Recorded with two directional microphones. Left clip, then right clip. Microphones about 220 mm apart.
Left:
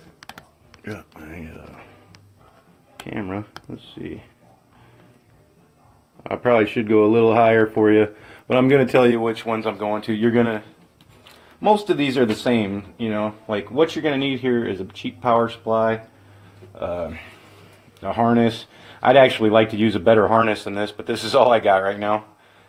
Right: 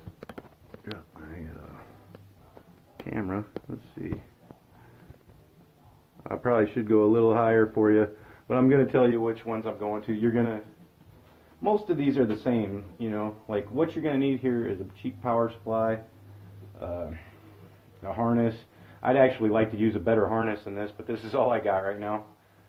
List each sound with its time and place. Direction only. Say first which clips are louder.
0.9 s a sound: left 7 dB; 40° left (ahead or behind)
3.1 s a sound: left 4 dB; 25° left (ahead or behind)
4.0 s speech: left 4 dB; 25° left (ahead or behind)
6.2 s speech: left 7 dB; 30° left (ahead or behind); by 10.5 s 50° left (ahead or behind)
11.6 s speech: left 8 dB; 50° left (ahead or behind)
18.0 s speech: left 9 dB; 55° left (ahead or behind)